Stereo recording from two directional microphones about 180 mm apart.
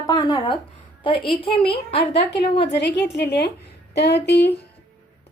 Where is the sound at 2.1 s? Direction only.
70° left (ahead or behind).